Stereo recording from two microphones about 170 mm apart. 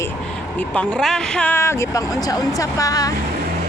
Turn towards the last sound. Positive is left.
turn(degrees=20)  # may be behind; listen again after turning